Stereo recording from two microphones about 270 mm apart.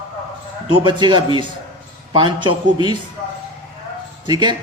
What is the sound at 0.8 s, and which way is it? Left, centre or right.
A man's voice, centre.